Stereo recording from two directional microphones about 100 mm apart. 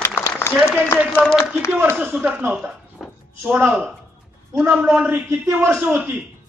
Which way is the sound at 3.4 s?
15° right (ahead or behind).